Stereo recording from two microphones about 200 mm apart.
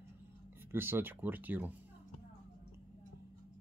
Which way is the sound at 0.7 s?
10° right (ahead or behind).